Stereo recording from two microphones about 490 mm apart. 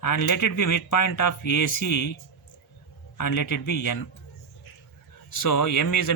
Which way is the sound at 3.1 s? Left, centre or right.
Left.